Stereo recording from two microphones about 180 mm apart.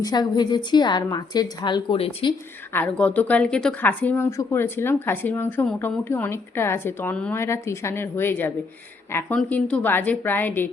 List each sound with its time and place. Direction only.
0.0 s a woman's voice: 25° left (ahead or behind)
2.7 s speech: 10° left (ahead or behind)